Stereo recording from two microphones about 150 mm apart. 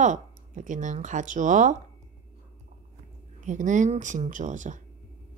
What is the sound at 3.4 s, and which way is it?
Speech, 55° right (ahead or behind).